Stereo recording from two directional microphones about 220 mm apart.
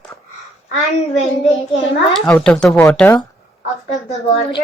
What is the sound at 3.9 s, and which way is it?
Speech, 30° left (ahead or behind).